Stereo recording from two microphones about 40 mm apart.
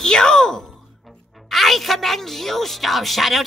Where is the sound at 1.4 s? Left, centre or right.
Centre.